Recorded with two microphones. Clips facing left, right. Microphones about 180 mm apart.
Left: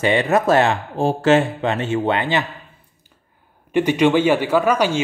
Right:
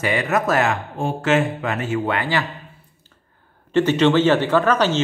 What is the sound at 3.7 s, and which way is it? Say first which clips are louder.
Speech: even; 10° left (ahead or behind).